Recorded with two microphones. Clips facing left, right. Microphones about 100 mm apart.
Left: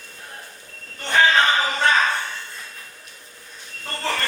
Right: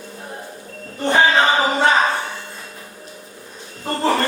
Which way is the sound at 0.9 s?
25° right (ahead or behind).